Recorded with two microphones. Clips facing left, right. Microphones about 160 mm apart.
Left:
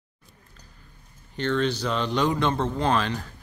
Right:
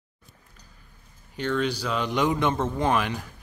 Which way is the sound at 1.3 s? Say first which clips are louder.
Left 1 dB; 5° right (ahead or behind).